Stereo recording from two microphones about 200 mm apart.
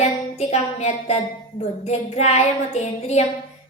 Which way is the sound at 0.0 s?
35° left (ahead or behind).